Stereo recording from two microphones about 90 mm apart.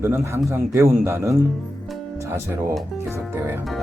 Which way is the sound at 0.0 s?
25° right (ahead or behind).